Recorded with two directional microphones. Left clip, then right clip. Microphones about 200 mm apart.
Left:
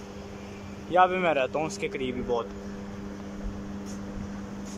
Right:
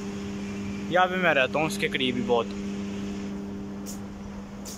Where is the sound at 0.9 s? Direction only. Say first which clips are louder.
Even; 5° left (ahead or behind).